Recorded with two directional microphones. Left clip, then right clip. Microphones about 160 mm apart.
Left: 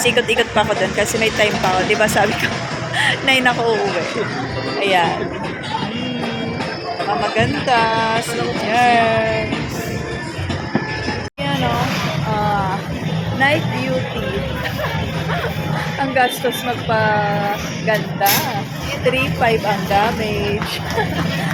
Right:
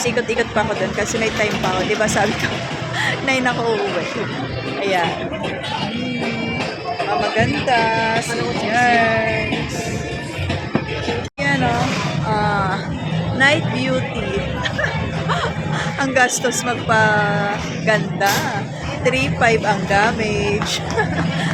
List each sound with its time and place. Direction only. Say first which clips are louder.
0.0 s speech: left 4 dB; 5° right (ahead or behind)
4.8 s speech: left 3 dB; 10° right (ahead or behind)
7.3 s speech: left 2 dB; 10° right (ahead or behind)
13.4 s speech: right 1 dB; 20° right (ahead or behind)
16.0 s speech: even; 20° right (ahead or behind)